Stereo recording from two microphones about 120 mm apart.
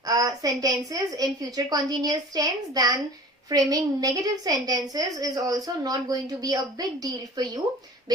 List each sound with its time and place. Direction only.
0.0 s a woman's voice: 30° right (ahead or behind)